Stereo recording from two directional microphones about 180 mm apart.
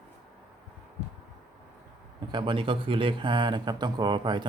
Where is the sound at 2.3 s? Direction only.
30° right (ahead or behind).